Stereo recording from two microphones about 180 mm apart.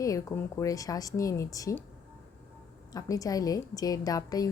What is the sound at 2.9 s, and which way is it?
A woman's voice, 20° left (ahead or behind).